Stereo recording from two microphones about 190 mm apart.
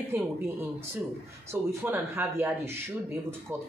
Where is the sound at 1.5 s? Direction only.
15° right (ahead or behind).